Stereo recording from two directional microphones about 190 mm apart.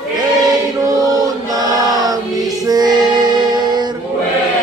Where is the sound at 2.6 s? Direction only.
20° right (ahead or behind).